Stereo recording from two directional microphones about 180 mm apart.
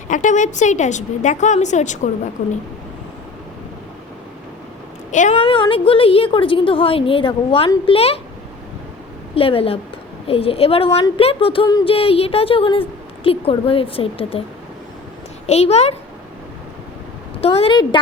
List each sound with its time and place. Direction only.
0.1 s a woman's voice: 45° left (ahead or behind)
5.1 s a woman's voice: 45° left (ahead or behind)
5.5 s a woman's voice: 30° left (ahead or behind)
9.3 s a woman's voice: 30° left (ahead or behind)
15.4 s a woman's voice: 35° left (ahead or behind)
17.4 s a woman's voice: 35° left (ahead or behind)